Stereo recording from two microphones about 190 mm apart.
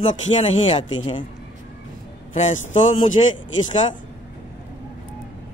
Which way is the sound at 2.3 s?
40° left (ahead or behind).